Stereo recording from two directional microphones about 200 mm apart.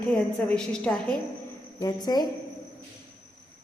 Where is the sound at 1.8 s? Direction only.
20° left (ahead or behind).